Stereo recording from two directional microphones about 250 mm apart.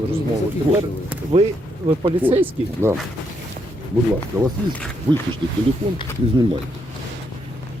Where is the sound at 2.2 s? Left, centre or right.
Centre.